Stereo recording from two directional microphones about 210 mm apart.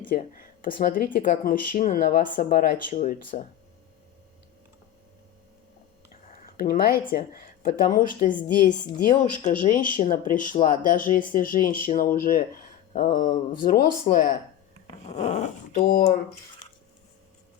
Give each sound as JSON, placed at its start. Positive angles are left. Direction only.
{"t": 0.1, "sound": "speech", "side_deg": 40}
{"t": 6.4, "sound": "speech", "side_deg": 45}
{"t": 14.8, "sound": "speech", "side_deg": 30}